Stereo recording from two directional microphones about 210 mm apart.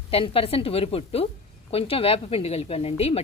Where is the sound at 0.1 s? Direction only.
25° left (ahead or behind).